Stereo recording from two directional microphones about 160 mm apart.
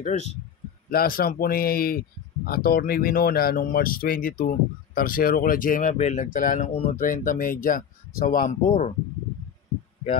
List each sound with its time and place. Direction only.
0.8 s speech: 65° left (ahead or behind); by 7.0 s 45° left (ahead or behind)
7.0 s speech: 60° left (ahead or behind)